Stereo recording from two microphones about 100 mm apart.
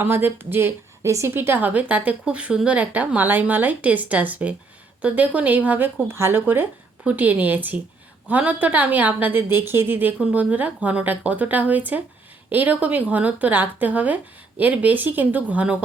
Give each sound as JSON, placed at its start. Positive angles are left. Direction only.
{"t": 0.0, "sound": "a woman's voice", "side_deg": -20}